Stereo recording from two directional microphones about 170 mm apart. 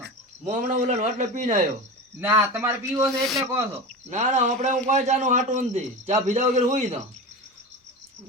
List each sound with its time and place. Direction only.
0.4 s a man's voice: 45° right (ahead or behind)
2.2 s speech: 10° right (ahead or behind)
3.2 s speech: centre (ahead or behind)
4.1 s a man's voice: 45° right (ahead or behind)